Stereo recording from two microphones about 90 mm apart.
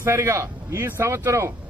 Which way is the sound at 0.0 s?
30° right (ahead or behind).